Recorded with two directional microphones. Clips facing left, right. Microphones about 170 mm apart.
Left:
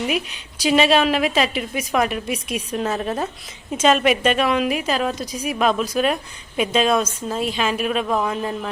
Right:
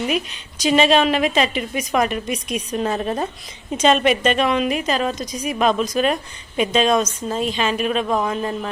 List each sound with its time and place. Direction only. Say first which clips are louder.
0.1 s a woman's voice: right 1 dB; 5° left (ahead or behind)